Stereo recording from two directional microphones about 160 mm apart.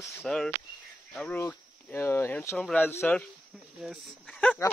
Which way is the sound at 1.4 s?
15° left (ahead or behind).